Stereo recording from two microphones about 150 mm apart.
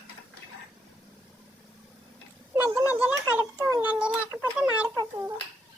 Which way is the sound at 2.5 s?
15° right (ahead or behind).